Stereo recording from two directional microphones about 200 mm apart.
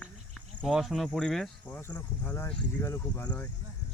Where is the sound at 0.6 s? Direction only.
Centre (ahead or behind).